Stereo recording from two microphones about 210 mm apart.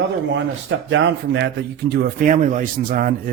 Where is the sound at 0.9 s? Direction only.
60° right (ahead or behind).